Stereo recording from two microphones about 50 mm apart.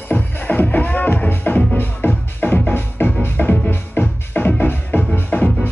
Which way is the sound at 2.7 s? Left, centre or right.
Left.